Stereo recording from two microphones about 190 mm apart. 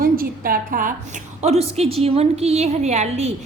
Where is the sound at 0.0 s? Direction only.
50° right (ahead or behind).